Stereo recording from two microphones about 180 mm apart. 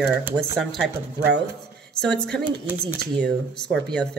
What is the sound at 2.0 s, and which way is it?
Speech, 5° left (ahead or behind).